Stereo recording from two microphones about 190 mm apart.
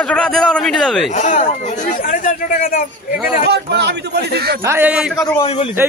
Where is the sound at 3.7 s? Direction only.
65° right (ahead or behind).